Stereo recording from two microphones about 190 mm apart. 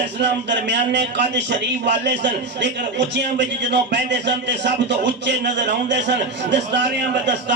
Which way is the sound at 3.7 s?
65° right (ahead or behind).